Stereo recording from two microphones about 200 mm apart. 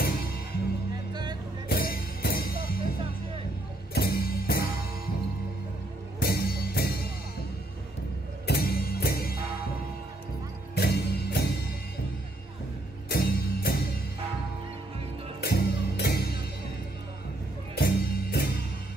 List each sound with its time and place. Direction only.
1.7 s music: 50° left (ahead or behind)
3.9 s music: 50° left (ahead or behind)
6.1 s music: 50° left (ahead or behind)
8.5 s music: 50° left (ahead or behind)
10.7 s music: 55° left (ahead or behind)
13.1 s music: 50° left (ahead or behind)
15.4 s music: 55° left (ahead or behind)
17.7 s music: 50° left (ahead or behind)